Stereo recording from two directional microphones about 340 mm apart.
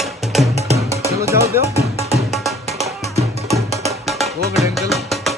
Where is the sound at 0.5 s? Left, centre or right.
Centre.